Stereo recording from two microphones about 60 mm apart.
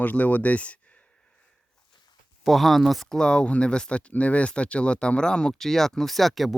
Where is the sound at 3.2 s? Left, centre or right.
Centre.